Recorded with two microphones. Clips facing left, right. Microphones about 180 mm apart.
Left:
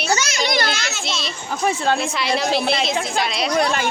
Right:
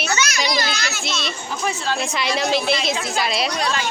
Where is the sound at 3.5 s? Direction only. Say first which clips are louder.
Left 4 dB; 55° left (ahead or behind).